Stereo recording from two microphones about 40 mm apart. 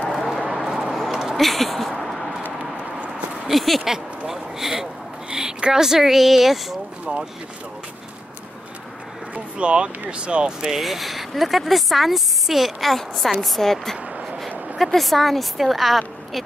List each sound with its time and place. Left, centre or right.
0.1 s a sound: centre
1.3 s a sound: centre
3.4 s speech: centre
3.8 s speech: centre
7.1 s speech: right
9.3 s speech: right
10.8 s speech: centre
15.0 s speech: centre